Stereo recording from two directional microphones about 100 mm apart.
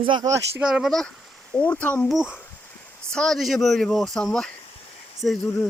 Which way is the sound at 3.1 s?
5° left (ahead or behind).